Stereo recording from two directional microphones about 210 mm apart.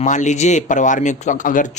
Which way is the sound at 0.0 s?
35° left (ahead or behind).